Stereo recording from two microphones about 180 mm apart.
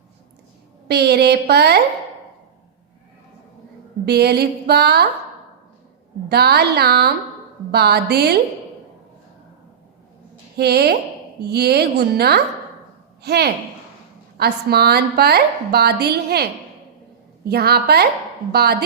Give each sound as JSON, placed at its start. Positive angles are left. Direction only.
{"t": 0.9, "sound": "a woman's voice", "side_deg": -65}
{"t": 4.0, "sound": "a woman's voice", "side_deg": -65}
{"t": 6.2, "sound": "a woman's voice", "side_deg": -65}
{"t": 10.6, "sound": "a woman's voice", "side_deg": -65}
{"t": 17.5, "sound": "a woman's voice", "side_deg": -60}